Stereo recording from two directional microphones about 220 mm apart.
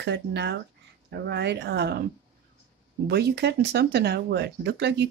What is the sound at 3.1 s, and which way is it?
Speech, 50° right (ahead or behind).